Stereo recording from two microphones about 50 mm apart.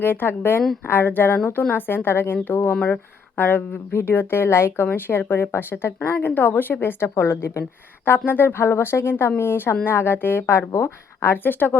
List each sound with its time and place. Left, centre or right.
0.0 s a woman's voice: left
3.9 s a woman's voice: left
8.0 s a woman's voice: left
10.8 s speech: left
11.4 s speech: left